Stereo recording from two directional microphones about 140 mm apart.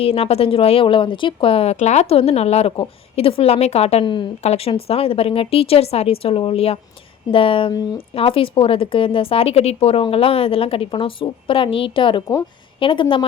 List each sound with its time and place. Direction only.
0.0 s speech: 45° left (ahead or behind)
1.7 s a woman's voice: 55° left (ahead or behind)
4.0 s a woman's voice: 35° left (ahead or behind)
7.7 s speech: 25° left (ahead or behind)
7.9 s speech: 40° left (ahead or behind)